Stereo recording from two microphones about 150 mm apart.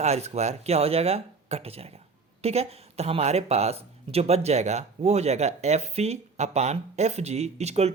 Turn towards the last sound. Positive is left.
turn(degrees=-45)  # may be behind; listen again after turning